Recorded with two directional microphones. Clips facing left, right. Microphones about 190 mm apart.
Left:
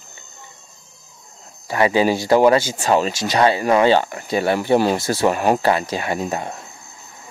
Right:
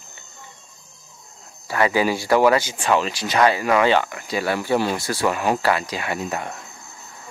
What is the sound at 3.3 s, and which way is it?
Speech, 30° left (ahead or behind).